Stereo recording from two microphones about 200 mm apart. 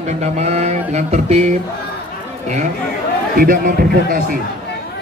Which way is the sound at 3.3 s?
45° right (ahead or behind).